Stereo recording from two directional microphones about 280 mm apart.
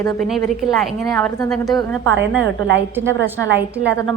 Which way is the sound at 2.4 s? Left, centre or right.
Right.